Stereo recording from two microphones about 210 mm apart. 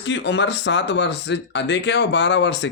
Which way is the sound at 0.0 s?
60° left (ahead or behind).